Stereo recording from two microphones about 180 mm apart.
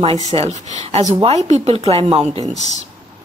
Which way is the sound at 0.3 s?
35° right (ahead or behind).